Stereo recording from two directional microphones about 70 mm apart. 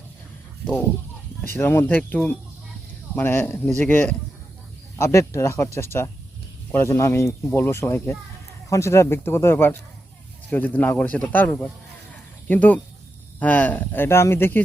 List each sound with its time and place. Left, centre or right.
1.4 s a man's voice: left
4.9 s a man's voice: left